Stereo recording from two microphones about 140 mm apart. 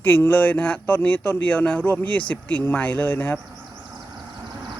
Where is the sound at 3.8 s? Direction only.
25° right (ahead or behind).